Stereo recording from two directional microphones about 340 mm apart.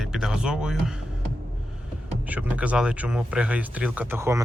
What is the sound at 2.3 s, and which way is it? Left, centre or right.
Speech, centre.